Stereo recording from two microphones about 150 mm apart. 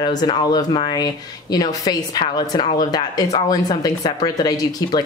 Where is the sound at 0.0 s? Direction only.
25° left (ahead or behind).